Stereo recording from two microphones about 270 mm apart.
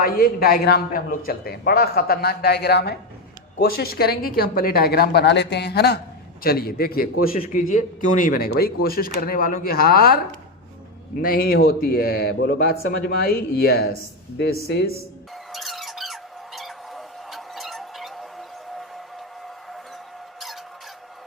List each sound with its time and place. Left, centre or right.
0.0 s a man's voice: left
11.2 s a man's voice: left
15.5 s squeak: centre